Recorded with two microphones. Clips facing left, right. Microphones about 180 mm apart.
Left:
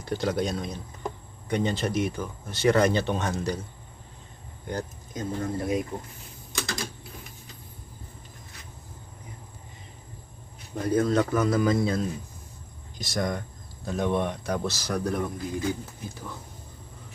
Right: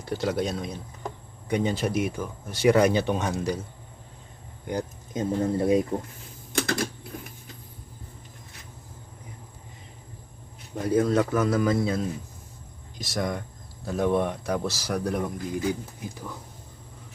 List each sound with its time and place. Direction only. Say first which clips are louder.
0.0 s a man's voice: even; 5° right (ahead or behind)
4.6 s speech: right 3 dB; 20° right (ahead or behind)
6.5 s typing: right 7 dB; 55° right (ahead or behind)
10.8 s a man's voice: right 1 dB; 10° right (ahead or behind)